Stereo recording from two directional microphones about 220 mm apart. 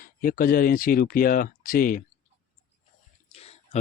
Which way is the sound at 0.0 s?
40° left (ahead or behind).